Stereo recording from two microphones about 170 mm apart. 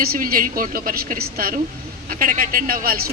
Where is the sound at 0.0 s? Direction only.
60° right (ahead or behind).